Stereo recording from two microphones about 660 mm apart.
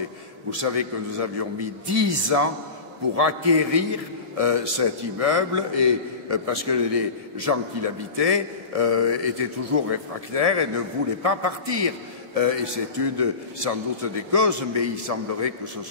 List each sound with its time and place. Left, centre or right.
0.5 s a man's voice: right